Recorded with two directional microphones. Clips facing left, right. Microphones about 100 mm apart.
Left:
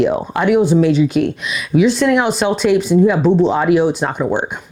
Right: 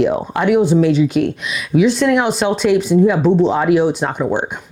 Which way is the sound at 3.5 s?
20° left (ahead or behind).